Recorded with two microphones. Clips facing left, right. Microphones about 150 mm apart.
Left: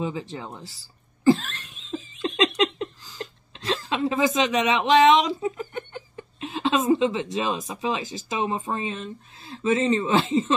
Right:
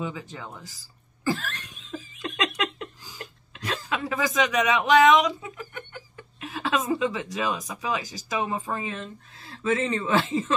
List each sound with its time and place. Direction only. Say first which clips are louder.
0.0 s speech: left 4 dB; 30° left (ahead or behind)
1.8 s laughter: left 9 dB; 25° left (ahead or behind)
3.2 s speech: left 4 dB; 25° left (ahead or behind)